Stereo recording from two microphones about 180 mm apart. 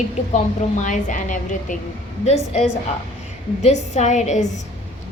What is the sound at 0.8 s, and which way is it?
A woman's voice, 45° left (ahead or behind).